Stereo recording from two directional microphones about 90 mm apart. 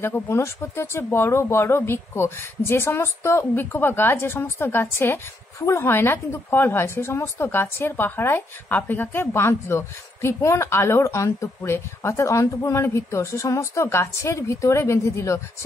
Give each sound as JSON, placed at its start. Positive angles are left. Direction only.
{"t": 0.0, "sound": "speech", "side_deg": 30}